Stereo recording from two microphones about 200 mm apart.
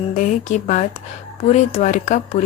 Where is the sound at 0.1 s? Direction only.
35° left (ahead or behind).